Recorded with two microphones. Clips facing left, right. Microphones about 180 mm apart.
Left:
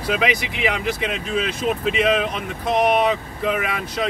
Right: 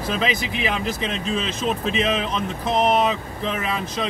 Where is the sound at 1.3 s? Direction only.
55° left (ahead or behind).